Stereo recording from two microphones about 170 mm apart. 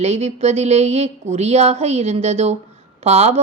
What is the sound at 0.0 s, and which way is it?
Speech, 40° right (ahead or behind).